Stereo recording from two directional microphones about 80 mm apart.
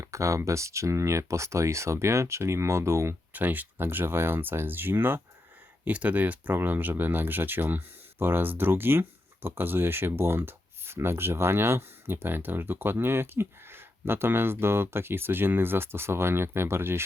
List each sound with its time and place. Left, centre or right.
0.0 s speech: right
3.3 s speech: right